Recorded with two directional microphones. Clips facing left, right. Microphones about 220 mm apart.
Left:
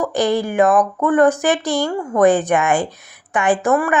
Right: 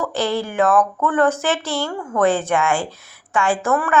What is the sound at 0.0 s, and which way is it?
A woman's voice, 15° left (ahead or behind).